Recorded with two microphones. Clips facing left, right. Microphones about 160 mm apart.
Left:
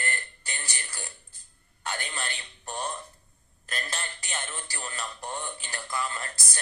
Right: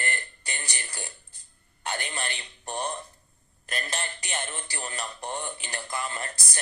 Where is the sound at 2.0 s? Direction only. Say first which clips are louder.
Right 2 dB; centre (ahead or behind).